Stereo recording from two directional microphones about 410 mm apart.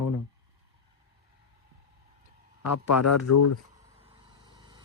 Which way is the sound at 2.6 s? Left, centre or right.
Left.